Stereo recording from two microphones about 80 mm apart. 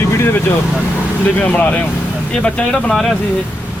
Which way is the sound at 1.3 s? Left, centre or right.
Centre.